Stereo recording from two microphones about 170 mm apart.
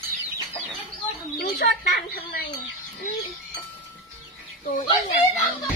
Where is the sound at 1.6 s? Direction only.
75° left (ahead or behind).